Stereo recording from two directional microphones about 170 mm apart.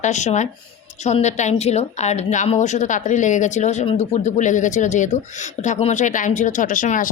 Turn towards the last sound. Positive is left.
turn(degrees=50)  # may be behind; listen again after turning